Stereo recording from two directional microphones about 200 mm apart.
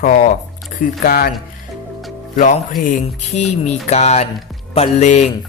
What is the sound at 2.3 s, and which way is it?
Music, 40° left (ahead or behind).